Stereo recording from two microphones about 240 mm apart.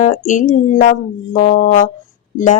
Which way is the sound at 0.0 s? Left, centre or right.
Left.